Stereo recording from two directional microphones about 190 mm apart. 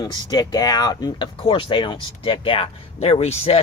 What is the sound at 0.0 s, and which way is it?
Speech, 20° left (ahead or behind).